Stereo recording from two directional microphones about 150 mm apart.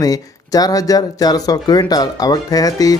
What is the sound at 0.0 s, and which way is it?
Speech, 25° left (ahead or behind).